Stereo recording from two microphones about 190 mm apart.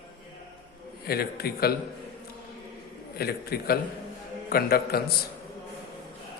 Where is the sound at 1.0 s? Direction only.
55° left (ahead or behind).